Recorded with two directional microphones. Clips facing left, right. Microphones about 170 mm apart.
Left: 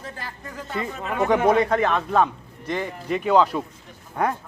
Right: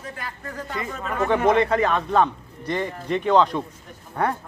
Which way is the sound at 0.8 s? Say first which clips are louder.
Left 1 dB; 15° left (ahead or behind).